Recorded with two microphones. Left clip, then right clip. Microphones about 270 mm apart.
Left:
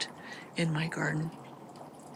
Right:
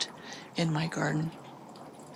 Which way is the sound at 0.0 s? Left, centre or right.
Centre.